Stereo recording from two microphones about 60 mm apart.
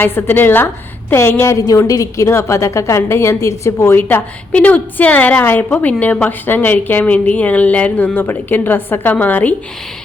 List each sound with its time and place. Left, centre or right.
0.0 s a woman's voice: left
1.5 s a woman's voice: left
1.9 s a woman's voice: left
2.2 s a woman's voice: left
4.5 s a woman's voice: left
6.4 s a woman's voice: left